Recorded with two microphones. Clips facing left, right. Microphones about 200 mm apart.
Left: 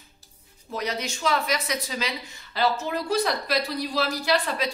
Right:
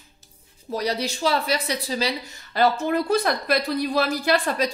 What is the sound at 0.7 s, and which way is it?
A woman's voice, 35° right (ahead or behind).